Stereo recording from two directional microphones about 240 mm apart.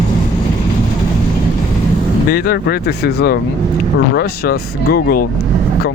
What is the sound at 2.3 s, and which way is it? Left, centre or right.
Speech, left.